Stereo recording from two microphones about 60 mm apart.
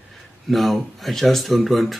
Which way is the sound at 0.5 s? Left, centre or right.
Centre.